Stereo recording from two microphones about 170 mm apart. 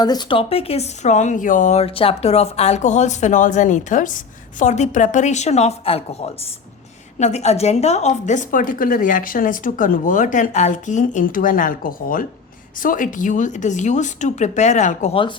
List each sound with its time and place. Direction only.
0.0 s a woman's voice: 25° left (ahead or behind); by 15.2 s 45° left (ahead or behind)